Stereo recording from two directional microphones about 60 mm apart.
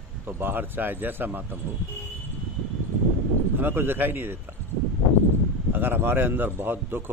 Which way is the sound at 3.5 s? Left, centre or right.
Right.